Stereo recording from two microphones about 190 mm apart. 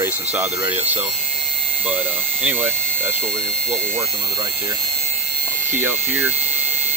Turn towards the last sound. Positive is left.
turn(degrees=-10)  # may be behind; listen again after turning